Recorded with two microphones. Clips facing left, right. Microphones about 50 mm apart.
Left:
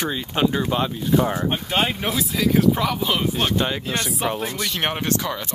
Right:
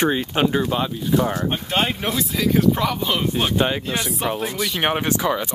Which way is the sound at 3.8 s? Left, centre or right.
Centre.